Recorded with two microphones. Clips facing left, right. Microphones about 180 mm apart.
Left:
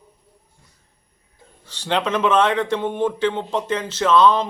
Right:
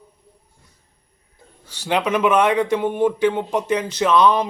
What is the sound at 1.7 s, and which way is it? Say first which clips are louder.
A man's voice: right 1 dB; 10° right (ahead or behind).